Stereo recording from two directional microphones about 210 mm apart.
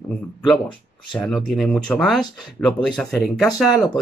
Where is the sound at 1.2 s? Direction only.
Centre (ahead or behind).